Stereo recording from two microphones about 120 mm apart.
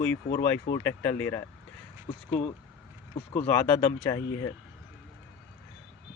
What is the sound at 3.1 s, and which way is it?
Speech, 50° left (ahead or behind).